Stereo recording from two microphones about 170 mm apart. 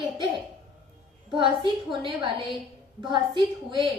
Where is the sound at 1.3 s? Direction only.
30° right (ahead or behind).